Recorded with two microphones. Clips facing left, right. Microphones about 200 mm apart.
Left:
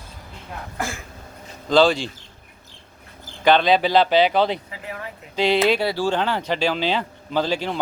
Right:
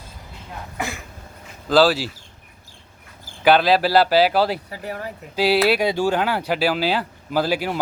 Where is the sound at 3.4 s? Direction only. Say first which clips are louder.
Right 1 dB; 5° right (ahead or behind).